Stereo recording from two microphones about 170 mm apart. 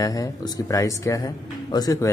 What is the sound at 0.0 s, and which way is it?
Speech, 20° left (ahead or behind).